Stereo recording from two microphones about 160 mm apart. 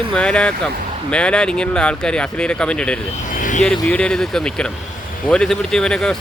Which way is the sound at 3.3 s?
55° left (ahead or behind).